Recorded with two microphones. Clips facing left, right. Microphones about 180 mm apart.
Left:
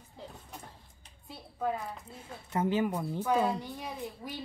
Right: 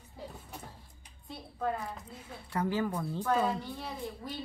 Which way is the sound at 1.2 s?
5° left (ahead or behind).